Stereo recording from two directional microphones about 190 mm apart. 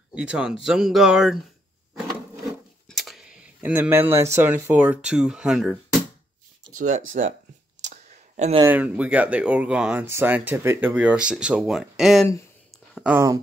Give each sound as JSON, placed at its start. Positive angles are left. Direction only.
{"t": 0.1, "sound": "speech", "side_deg": -5}
{"t": 2.9, "sound": "speech", "side_deg": 0}
{"t": 6.9, "sound": "speech", "side_deg": -90}
{"t": 7.9, "sound": "a sound", "side_deg": -35}
{"t": 8.6, "sound": "speech", "side_deg": -10}
{"t": 12.7, "sound": "a sound", "side_deg": 0}
{"t": 13.1, "sound": "speech", "side_deg": -15}